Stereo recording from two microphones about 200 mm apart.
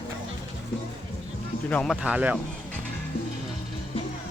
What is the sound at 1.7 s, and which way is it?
Speech, 5° left (ahead or behind).